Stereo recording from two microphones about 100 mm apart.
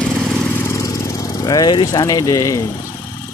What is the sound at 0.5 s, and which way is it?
Vehicle, 30° left (ahead or behind).